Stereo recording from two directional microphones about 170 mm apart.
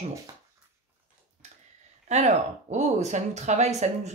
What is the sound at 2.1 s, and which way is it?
A woman's voice, 45° right (ahead or behind).